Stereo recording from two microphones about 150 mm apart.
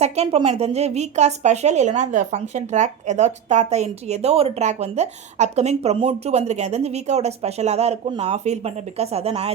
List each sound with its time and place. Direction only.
0.0 s speech: 40° right (ahead or behind)